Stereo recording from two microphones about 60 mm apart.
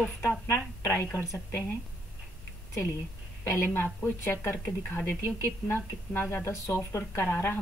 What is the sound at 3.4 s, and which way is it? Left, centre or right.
Speech, left.